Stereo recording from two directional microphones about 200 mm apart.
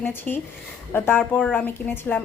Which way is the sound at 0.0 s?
10° left (ahead or behind).